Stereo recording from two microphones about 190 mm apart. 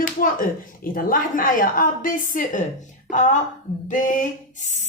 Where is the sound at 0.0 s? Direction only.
45° left (ahead or behind).